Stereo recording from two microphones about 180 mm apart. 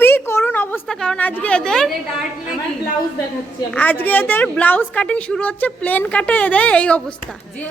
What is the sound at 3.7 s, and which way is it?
A woman's voice, 10° left (ahead or behind).